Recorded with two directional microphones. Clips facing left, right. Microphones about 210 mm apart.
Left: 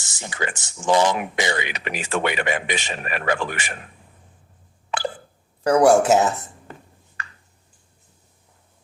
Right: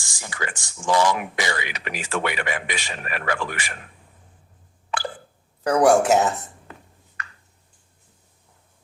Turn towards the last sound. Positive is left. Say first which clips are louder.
# left 1 dB
turn(degrees=30)  # may be behind; listen again after turning